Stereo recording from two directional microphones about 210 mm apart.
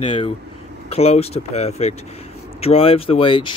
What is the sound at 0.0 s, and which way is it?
Speech, 25° left (ahead or behind).